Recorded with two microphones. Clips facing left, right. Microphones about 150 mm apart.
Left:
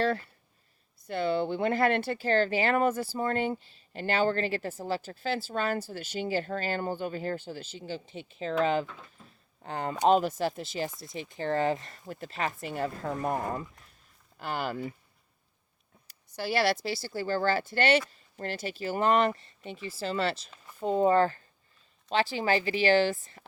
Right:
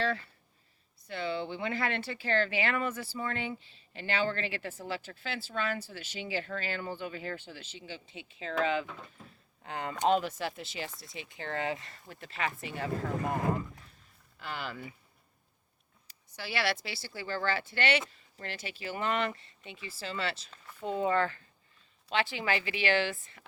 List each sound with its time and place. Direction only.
1.0 s speech: 45° left (ahead or behind)
9.0 s speech: 5° right (ahead or behind)
9.6 s speech: 35° left (ahead or behind)
14.3 s speech: 45° left (ahead or behind)
16.0 s speech: 45° left (ahead or behind)